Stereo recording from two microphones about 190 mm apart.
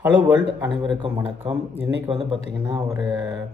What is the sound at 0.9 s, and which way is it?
Speech, 25° right (ahead or behind).